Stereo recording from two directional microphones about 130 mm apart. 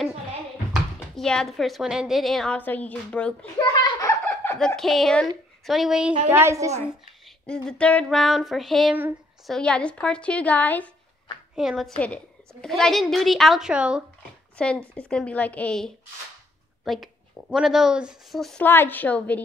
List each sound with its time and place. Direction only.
1.1 s a woman's voice: 5° left (ahead or behind)
3.5 s a sound: 30° left (ahead or behind)
4.6 s a woman's voice: 5° left (ahead or behind)
6.3 s a woman's voice: 20° right (ahead or behind)
7.4 s a woman's voice: 5° left (ahead or behind)
11.5 s a woman's voice: centre (ahead or behind)
14.6 s a woman's voice: 10° left (ahead or behind)
18.6 s a woman's voice: 15° left (ahead or behind)